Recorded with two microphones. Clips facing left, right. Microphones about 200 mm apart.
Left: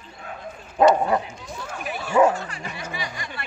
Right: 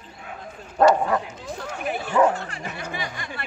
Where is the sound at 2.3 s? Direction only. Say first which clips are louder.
Even; 55° right (ahead or behind).